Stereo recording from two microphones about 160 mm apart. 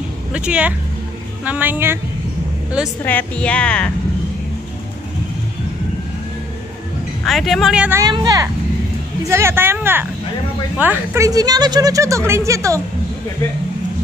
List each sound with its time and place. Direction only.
0.3 s speech: 5° right (ahead or behind)
3.0 s a woman's voice: 10° left (ahead or behind)
7.2 s speech: centre (ahead or behind)
8.0 s speech: 25° right (ahead or behind)